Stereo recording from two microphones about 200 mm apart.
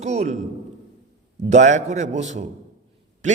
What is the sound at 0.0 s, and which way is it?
Speech, 35° right (ahead or behind).